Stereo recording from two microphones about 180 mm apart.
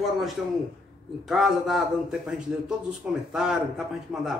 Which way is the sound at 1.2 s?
Centre (ahead or behind).